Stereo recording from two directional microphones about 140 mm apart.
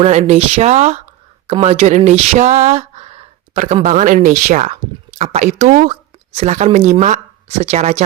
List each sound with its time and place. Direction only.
0.0 s speech: 50° right (ahead or behind)
3.8 s speech: 60° right (ahead or behind)